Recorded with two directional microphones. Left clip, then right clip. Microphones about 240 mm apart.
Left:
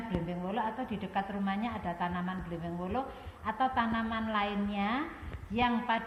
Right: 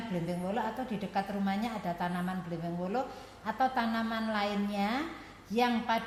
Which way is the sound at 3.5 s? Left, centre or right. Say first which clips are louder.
Even; right.